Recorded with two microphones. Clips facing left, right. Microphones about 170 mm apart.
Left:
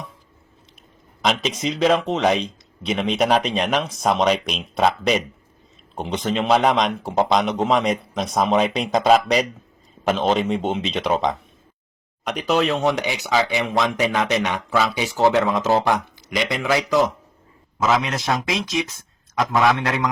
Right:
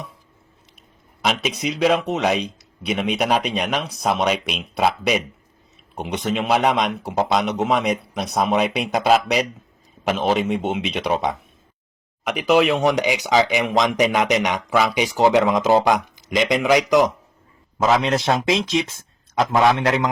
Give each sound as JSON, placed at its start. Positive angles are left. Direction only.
{"t": 1.2, "sound": "speech", "side_deg": -5}
{"t": 17.7, "sound": "speech", "side_deg": -30}